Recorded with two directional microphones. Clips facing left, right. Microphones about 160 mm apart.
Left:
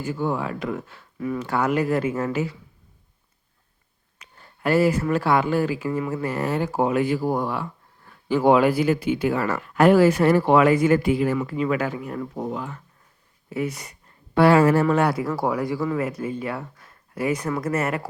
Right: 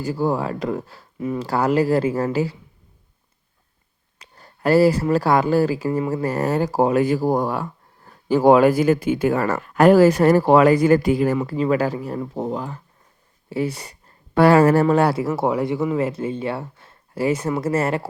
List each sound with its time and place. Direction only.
0.0 s speech: 35° right (ahead or behind)
1.2 s speech: 25° right (ahead or behind)
1.5 s speech: 35° right (ahead or behind)
4.2 s speech: 40° right (ahead or behind)
14.3 s speech: 40° right (ahead or behind)